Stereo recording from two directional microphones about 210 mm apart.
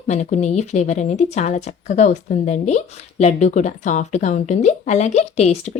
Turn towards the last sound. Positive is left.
turn(degrees=30)  # may be behind; listen again after turning